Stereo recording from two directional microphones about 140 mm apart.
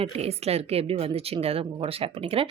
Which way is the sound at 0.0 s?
45° right (ahead or behind).